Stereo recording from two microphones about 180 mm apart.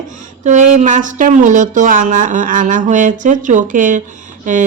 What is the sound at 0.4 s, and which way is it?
A woman's voice, 45° right (ahead or behind).